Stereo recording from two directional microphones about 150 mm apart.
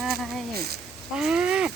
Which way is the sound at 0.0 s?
Centre (ahead or behind).